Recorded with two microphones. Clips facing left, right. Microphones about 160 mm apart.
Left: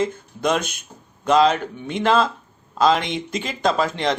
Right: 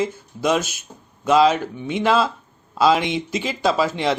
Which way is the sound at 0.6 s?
55° left (ahead or behind).